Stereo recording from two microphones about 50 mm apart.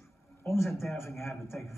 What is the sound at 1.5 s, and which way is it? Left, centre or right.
Speech, left.